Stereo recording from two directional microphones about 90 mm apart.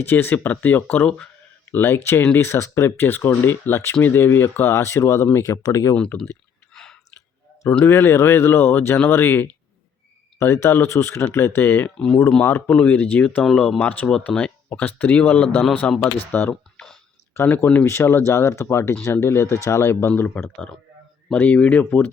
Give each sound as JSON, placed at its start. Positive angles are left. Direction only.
{"t": 0.1, "sound": "speech", "side_deg": 20}
{"t": 1.7, "sound": "speech", "side_deg": 20}
{"t": 7.9, "sound": "speech", "side_deg": 25}
{"t": 11.9, "sound": "speech", "side_deg": 10}
{"t": 12.4, "sound": "speech", "side_deg": 25}
{"t": 20.1, "sound": "speech", "side_deg": 15}